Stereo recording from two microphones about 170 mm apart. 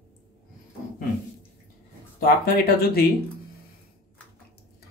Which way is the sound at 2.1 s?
60° left (ahead or behind).